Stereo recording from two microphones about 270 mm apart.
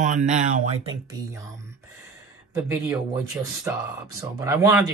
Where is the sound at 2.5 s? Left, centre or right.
Centre.